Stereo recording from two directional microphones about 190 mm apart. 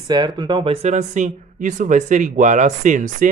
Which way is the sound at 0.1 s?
20° right (ahead or behind).